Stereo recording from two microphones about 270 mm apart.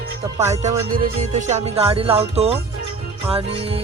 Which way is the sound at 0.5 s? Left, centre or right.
Right.